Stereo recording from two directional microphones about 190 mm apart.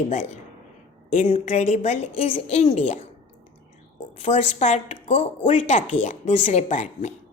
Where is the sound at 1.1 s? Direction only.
40° left (ahead or behind).